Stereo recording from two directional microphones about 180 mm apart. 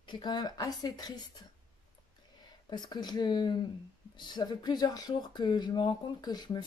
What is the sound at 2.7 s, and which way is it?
Speech, 25° left (ahead or behind).